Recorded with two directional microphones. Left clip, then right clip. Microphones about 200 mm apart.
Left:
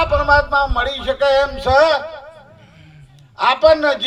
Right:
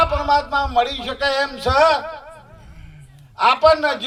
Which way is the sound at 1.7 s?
25° left (ahead or behind).